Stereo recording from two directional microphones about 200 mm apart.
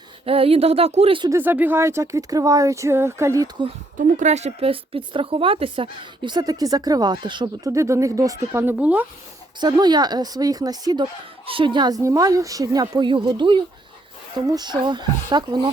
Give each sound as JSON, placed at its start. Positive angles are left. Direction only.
{"t": 0.3, "sound": "speech", "side_deg": -30}
{"t": 1.3, "sound": "speech", "side_deg": -10}
{"t": 3.9, "sound": "speech", "side_deg": -40}
{"t": 9.6, "sound": "speech", "side_deg": -20}